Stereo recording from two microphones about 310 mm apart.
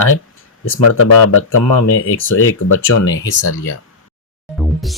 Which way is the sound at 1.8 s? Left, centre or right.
Left.